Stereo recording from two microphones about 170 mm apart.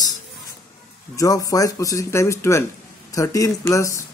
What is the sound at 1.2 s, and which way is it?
Speech, 20° left (ahead or behind).